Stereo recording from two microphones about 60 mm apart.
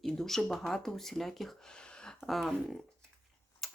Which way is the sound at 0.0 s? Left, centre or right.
Centre.